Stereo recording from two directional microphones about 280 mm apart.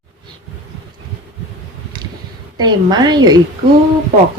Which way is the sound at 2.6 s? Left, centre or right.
Centre.